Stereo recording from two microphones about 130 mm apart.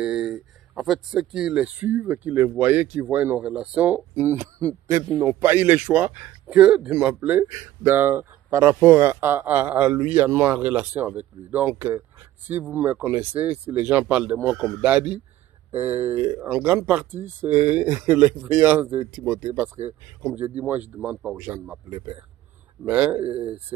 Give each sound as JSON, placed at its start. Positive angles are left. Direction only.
{"t": 0.0, "sound": "speech", "side_deg": -5}
{"t": 22.8, "sound": "speech", "side_deg": -10}